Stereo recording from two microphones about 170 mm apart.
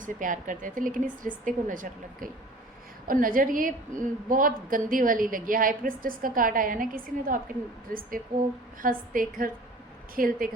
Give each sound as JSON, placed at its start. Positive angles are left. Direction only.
{"t": 0.0, "sound": "a woman's voice", "side_deg": -50}
{"t": 8.8, "sound": "a woman's voice", "side_deg": -55}